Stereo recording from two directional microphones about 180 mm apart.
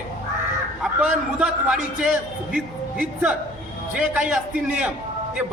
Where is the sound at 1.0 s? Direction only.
5° right (ahead or behind).